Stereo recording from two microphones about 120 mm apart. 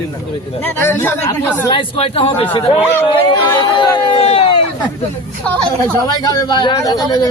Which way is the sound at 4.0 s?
50° left (ahead or behind).